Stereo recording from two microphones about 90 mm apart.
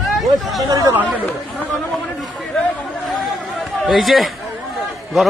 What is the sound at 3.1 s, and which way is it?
Chatter, centre (ahead or behind).